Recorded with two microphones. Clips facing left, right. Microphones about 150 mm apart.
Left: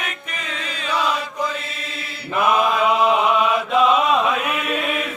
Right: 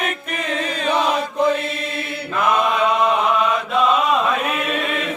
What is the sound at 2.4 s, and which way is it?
Chant, 5° left (ahead or behind).